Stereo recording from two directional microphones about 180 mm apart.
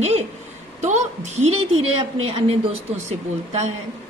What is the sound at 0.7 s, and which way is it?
A woman's voice, 40° right (ahead or behind).